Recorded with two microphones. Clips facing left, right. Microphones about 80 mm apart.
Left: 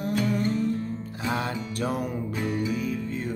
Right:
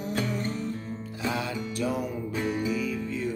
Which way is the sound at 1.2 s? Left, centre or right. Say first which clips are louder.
Left 1 dB; left.